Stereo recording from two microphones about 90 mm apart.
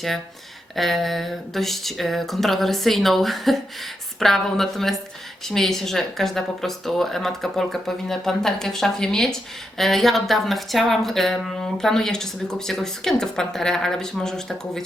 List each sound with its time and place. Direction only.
0.8 s a woman's voice: centre (ahead or behind)